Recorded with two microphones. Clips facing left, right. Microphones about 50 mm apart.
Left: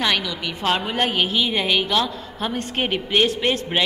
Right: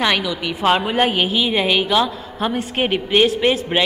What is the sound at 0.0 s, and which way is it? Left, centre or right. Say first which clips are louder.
A woman's voice: right 3 dB; centre.